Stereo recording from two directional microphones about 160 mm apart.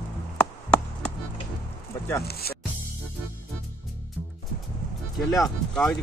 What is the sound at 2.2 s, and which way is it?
Music, 80° left.